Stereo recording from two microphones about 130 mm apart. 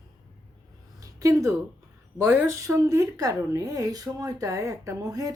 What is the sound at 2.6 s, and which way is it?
Speech, 25° right (ahead or behind).